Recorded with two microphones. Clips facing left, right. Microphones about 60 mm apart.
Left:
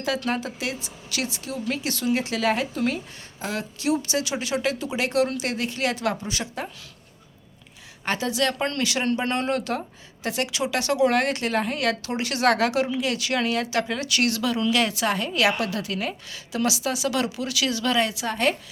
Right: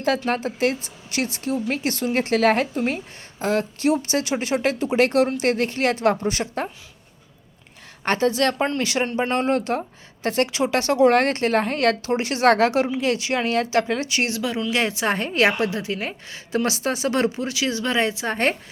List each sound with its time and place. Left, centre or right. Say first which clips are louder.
0.3 s a woman's voice: right 5 dB; right
8.0 s a woman's voice: right 5 dB; right
8.5 s speech: right 4 dB; centre
8.8 s a woman's voice: right 2 dB; right